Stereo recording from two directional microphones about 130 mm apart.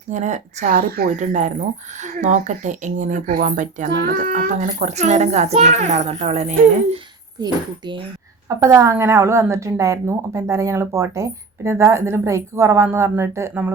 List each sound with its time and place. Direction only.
0.1 s speech: 65° right (ahead or behind)
7.4 s speech: 35° right (ahead or behind)
8.4 s a woman's voice: 25° right (ahead or behind)